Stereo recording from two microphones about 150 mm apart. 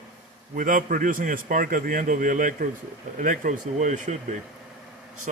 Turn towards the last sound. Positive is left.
turn(degrees=-55)  # may be behind; listen again after turning